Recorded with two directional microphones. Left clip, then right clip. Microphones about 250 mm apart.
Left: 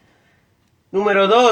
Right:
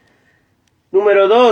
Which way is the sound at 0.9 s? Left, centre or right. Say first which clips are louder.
Right 4 dB; centre.